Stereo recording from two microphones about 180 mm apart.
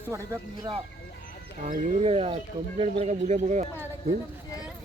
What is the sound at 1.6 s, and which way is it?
Speech, 40° right (ahead or behind).